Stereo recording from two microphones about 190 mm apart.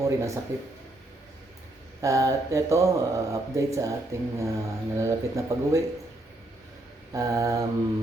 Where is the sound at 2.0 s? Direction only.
15° right (ahead or behind).